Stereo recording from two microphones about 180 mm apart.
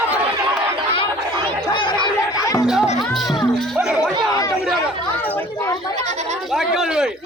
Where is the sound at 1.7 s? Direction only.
25° left (ahead or behind).